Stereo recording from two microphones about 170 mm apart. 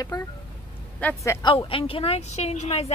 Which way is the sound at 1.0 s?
10° left (ahead or behind).